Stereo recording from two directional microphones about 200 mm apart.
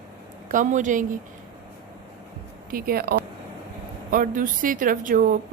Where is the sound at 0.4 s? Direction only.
40° right (ahead or behind).